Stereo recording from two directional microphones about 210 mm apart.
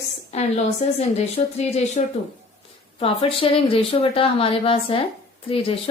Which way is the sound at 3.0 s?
25° left (ahead or behind).